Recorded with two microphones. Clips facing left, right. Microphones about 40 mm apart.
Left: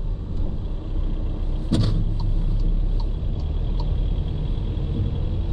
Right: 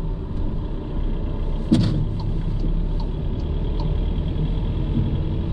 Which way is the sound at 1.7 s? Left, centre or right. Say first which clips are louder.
Right 5 dB; centre.